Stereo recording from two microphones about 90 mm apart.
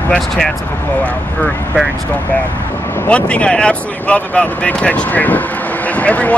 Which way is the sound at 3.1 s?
15° left (ahead or behind).